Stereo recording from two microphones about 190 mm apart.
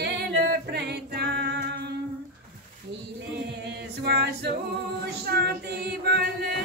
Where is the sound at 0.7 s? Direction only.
60° right (ahead or behind).